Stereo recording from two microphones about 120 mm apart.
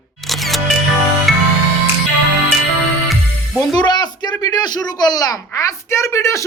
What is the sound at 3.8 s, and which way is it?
Speech, 35° left (ahead or behind).